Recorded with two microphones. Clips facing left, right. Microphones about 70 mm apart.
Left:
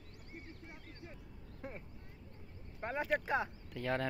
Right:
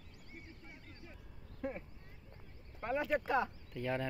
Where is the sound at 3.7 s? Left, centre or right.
Left.